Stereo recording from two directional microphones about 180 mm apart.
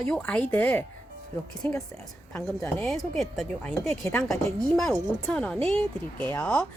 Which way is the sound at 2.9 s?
Centre (ahead or behind).